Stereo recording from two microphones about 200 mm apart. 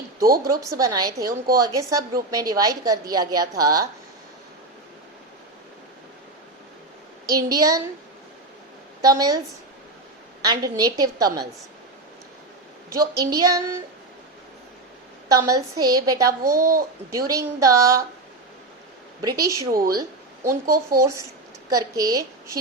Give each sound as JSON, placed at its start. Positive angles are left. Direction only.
{"t": 0.3, "sound": "a woman's voice", "side_deg": -45}
{"t": 0.8, "sound": "a woman's voice", "side_deg": -20}
{"t": 7.3, "sound": "a woman's voice", "side_deg": -20}
{"t": 9.0, "sound": "a woman's voice", "side_deg": -20}
{"t": 10.4, "sound": "a woman's voice", "side_deg": -20}
{"t": 12.9, "sound": "a woman's voice", "side_deg": -15}
{"t": 15.3, "sound": "a woman's voice", "side_deg": -15}
{"t": 19.2, "sound": "a woman's voice", "side_deg": -15}
{"t": 19.7, "sound": "a woman's voice", "side_deg": -45}
{"t": 20.0, "sound": "a sound", "side_deg": -15}
{"t": 21.0, "sound": "a woman's voice", "side_deg": -15}